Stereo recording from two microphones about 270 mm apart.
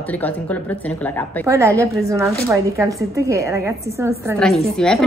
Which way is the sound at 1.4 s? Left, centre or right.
Centre.